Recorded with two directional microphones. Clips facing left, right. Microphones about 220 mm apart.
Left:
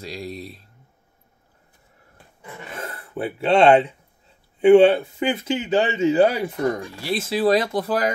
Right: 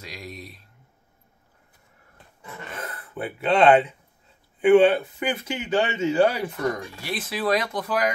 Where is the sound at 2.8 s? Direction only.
30° left (ahead or behind).